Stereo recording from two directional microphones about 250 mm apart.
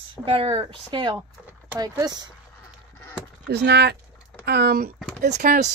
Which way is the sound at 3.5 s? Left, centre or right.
Right.